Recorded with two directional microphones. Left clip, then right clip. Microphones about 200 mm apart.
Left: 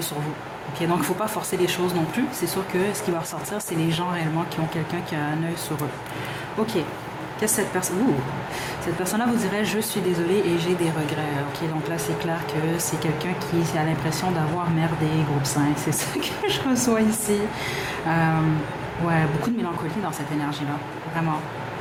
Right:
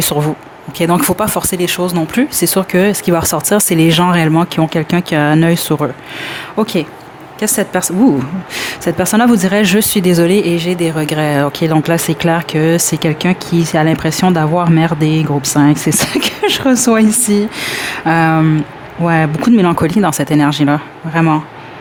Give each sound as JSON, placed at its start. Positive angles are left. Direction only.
{"t": 0.8, "sound": "speech", "side_deg": -45}
{"t": 7.3, "sound": "speech", "side_deg": -50}